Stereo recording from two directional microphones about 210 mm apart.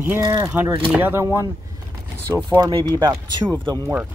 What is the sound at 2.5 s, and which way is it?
Speech, 20° right (ahead or behind).